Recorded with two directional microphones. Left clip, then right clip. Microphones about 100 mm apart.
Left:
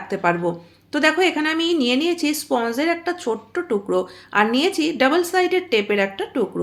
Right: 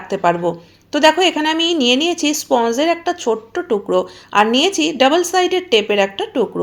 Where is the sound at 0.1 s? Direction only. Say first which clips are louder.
Right 4 dB; 20° right (ahead or behind).